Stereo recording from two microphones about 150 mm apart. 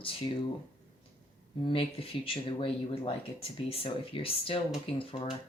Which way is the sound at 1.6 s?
40° left (ahead or behind).